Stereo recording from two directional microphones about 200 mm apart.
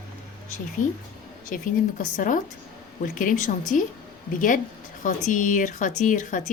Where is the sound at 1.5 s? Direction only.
45° left (ahead or behind).